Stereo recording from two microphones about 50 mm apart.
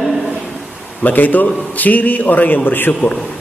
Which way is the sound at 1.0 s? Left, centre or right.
Left.